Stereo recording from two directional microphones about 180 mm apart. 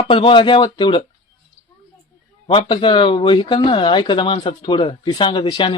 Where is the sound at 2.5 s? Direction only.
30° left (ahead or behind).